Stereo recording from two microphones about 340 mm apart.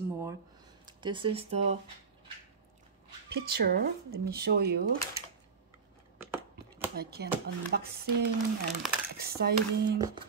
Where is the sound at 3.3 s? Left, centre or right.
Right.